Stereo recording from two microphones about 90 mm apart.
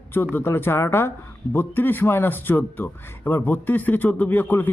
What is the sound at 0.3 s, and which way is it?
Speech, 25° left (ahead or behind).